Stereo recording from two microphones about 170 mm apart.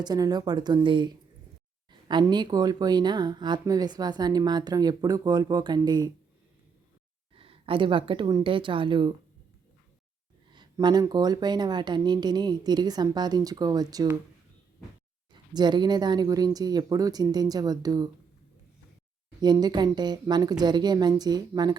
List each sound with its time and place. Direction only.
0.0 s speech: 25° right (ahead or behind)
7.3 s speech: 35° right (ahead or behind)
10.5 s speech: 25° right (ahead or behind)
15.3 s speech: 25° right (ahead or behind)
19.4 s speech: 25° right (ahead or behind)